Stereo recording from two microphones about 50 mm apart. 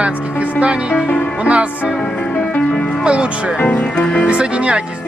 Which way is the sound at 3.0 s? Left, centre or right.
Right.